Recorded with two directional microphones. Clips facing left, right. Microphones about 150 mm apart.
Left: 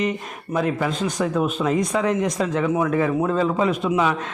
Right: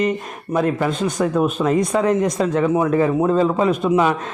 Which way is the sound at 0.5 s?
45° right (ahead or behind).